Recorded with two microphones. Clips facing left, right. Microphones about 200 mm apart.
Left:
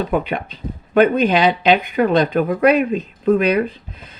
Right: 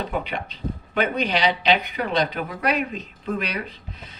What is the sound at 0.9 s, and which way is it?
Speech, 50° left (ahead or behind).